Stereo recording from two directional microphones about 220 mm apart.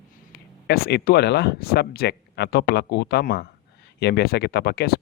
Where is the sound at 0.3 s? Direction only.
45° left (ahead or behind).